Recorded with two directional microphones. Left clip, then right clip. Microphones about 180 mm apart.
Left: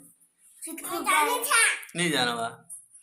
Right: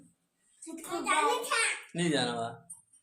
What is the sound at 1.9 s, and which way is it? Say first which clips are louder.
Speech: left 5 dB; 25° right (ahead or behind).